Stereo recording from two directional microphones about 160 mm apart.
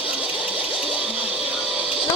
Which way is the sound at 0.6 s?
5° right (ahead or behind).